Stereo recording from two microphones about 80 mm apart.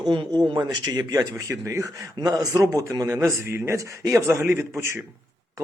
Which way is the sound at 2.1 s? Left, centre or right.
Right.